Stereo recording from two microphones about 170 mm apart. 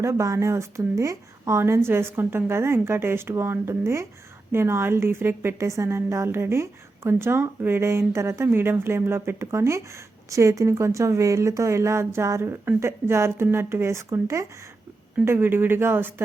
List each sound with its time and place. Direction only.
0.0 s a woman's voice: 20° right (ahead or behind)